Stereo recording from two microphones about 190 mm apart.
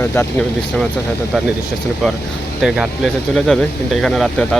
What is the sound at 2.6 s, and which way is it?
Speech, 5° right (ahead or behind).